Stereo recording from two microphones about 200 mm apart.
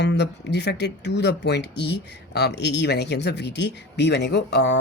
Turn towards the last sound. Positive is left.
turn(degrees=60)  # may be behind; listen again after turning